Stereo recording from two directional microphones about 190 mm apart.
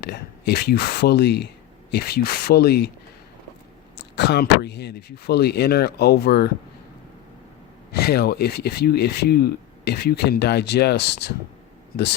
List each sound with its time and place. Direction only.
0.0 s speech: 60° left (ahead or behind)
3.9 s speech: 65° left (ahead or behind)
7.9 s speech: 55° left (ahead or behind)